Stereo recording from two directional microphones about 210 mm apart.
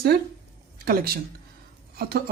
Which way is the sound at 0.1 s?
50° right (ahead or behind).